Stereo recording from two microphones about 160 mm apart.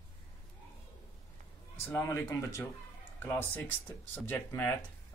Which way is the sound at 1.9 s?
15° left (ahead or behind).